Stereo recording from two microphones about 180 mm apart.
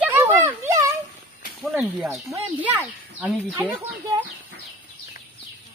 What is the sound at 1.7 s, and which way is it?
Speech, 5° right (ahead or behind).